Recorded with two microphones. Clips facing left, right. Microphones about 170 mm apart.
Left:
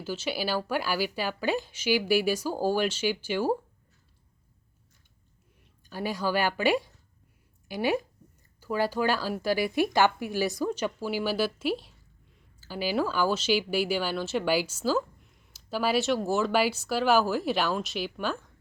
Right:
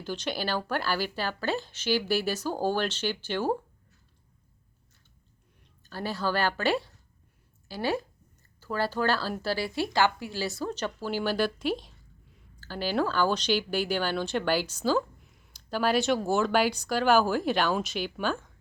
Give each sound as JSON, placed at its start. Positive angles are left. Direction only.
{"t": 0.0, "sound": "a woman's voice", "side_deg": 5}
{"t": 5.8, "sound": "a woman's voice", "side_deg": 10}